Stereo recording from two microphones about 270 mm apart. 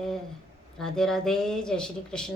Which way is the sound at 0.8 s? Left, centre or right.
Centre.